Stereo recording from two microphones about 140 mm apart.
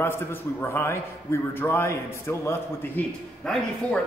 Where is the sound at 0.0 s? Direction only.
15° left (ahead or behind).